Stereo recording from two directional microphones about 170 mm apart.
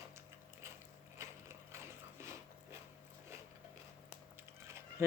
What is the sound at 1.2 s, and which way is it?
Ratchet, 15° right (ahead or behind).